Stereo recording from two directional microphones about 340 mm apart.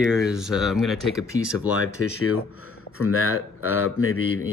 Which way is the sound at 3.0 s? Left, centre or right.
Left.